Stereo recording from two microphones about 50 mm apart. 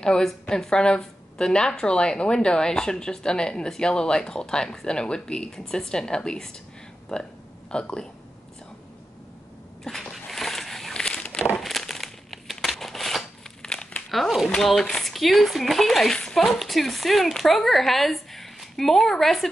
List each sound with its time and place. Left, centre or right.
0.0 s a woman's voice: centre
7.7 s a woman's voice: centre
9.8 s a sound: centre
11.6 s crumpling: centre
13.6 s crumpling: centre
14.1 s speech: centre